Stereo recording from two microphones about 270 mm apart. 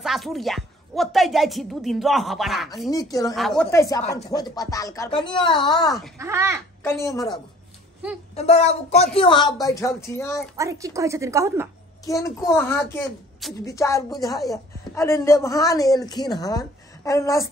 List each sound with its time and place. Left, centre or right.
0.0 s a woman's voice: centre
2.9 s a woman's voice: centre
3.3 s a woman's voice: centre
3.7 s a woman's voice: centre
6.1 s a woman's voice: centre
6.8 s a woman's voice: centre
8.4 s a woman's voice: left
10.5 s a woman's voice: centre
12.1 s a woman's voice: centre